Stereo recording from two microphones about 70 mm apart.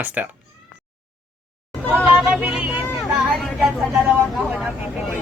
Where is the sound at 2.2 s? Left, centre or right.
Right.